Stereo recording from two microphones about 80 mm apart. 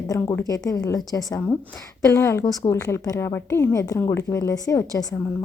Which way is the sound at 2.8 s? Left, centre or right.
Left.